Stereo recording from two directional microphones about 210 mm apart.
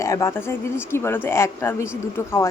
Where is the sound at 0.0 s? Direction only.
15° left (ahead or behind).